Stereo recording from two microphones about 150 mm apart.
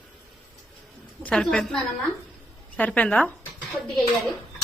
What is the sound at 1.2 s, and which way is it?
A woman's voice, 5° left (ahead or behind).